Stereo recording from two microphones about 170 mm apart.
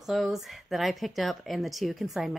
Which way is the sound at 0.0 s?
Centre (ahead or behind).